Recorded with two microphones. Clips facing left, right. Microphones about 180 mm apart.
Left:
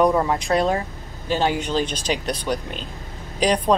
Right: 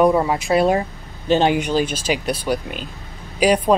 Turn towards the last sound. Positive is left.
turn(degrees=-10)  # may be behind; listen again after turning